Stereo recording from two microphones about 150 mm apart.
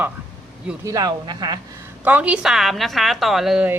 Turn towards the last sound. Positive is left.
turn(degrees=-5)  # may be behind; listen again after turning